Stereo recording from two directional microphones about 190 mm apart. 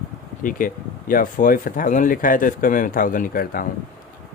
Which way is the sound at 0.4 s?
45° left (ahead or behind).